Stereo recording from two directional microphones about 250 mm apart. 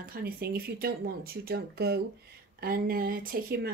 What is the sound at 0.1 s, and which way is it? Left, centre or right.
Speech, right.